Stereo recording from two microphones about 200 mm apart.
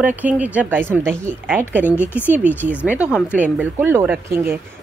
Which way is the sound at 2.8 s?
5° right (ahead or behind).